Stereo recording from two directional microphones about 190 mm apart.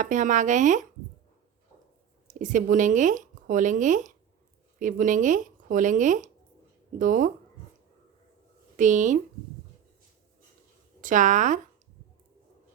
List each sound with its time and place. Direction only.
0.0 s speech: 40° right (ahead or behind)
2.2 s speech: 40° right (ahead or behind)
8.7 s speech: 40° right (ahead or behind)
11.0 s speech: 40° right (ahead or behind)